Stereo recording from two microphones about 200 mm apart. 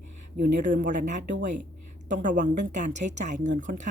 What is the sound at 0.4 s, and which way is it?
Speech, 5° right (ahead or behind).